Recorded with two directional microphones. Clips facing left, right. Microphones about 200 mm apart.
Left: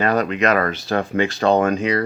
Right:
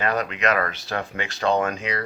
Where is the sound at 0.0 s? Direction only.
40° left (ahead or behind).